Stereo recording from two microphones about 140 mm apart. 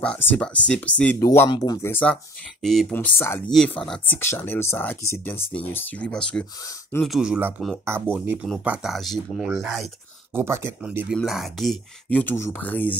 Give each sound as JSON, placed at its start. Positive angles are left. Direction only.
{"t": 0.0, "sound": "speech", "side_deg": 10}
{"t": 1.5, "sound": "speech", "side_deg": 30}
{"t": 1.9, "sound": "speech", "side_deg": 15}
{"t": 2.6, "sound": "speech", "side_deg": 0}
{"t": 8.6, "sound": "speech", "side_deg": 0}
{"t": 10.3, "sound": "speech", "side_deg": -20}